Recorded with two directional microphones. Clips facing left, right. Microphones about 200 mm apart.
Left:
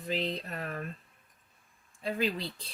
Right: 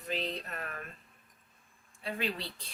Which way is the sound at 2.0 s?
35° left (ahead or behind).